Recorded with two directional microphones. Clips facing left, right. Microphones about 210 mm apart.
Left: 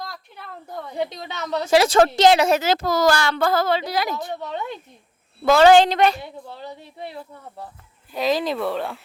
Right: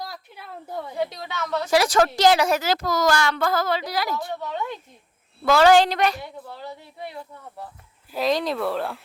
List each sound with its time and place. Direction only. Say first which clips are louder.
0.0 s a sound: even; 5° right (ahead or behind)
0.9 s a woman's voice: left 1 dB; 20° left (ahead or behind)
8.1 s speech: left 1 dB; centre (ahead or behind)